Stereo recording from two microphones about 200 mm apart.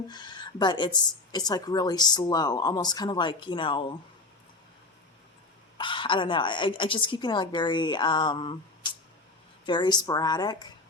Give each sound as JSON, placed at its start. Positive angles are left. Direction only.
{"t": 0.1, "sound": "speech", "side_deg": 20}
{"t": 5.7, "sound": "speech", "side_deg": 25}